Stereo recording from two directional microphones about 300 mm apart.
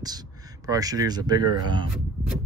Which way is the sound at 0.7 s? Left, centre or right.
Centre.